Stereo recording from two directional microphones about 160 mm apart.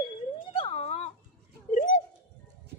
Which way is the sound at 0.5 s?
40° left (ahead or behind).